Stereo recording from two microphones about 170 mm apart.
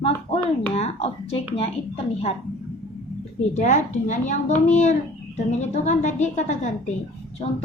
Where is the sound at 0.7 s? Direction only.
35° left (ahead or behind).